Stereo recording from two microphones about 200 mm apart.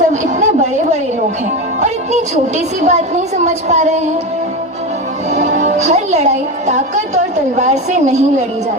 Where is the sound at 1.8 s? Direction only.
35° right (ahead or behind).